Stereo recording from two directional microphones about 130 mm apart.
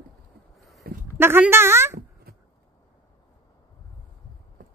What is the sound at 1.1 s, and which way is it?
Speech, 15° right (ahead or behind).